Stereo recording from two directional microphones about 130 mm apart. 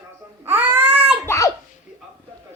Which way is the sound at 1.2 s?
25° left (ahead or behind).